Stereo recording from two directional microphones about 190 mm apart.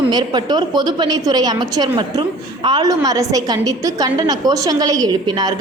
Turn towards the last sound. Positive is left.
turn(degrees=-20)  # may be behind; listen again after turning